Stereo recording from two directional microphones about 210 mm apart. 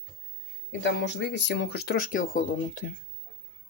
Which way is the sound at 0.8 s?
55° left (ahead or behind).